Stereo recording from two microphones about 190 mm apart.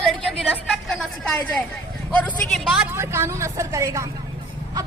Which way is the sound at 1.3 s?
10° left (ahead or behind).